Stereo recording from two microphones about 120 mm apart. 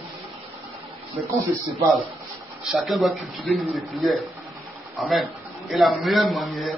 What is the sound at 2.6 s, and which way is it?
Speech, centre (ahead or behind).